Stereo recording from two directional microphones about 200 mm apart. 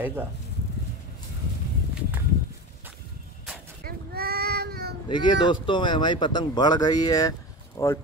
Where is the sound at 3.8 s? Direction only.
50° right (ahead or behind).